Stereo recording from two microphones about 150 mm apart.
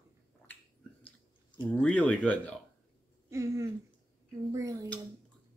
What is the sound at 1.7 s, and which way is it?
Speech, 10° left (ahead or behind).